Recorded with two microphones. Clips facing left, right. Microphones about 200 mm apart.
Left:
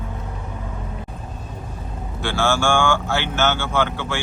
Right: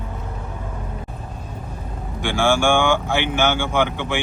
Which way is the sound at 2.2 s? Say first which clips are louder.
Right 2 dB; 15° right (ahead or behind).